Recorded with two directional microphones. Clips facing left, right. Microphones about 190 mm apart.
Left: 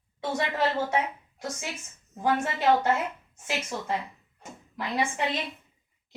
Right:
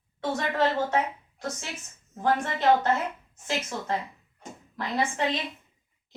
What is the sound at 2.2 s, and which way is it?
A woman's voice, 10° left (ahead or behind).